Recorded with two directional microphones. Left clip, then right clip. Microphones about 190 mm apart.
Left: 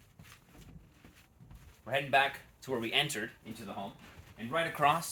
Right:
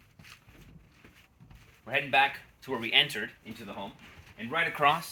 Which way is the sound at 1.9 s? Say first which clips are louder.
Right 3 dB; 15° left (ahead or behind).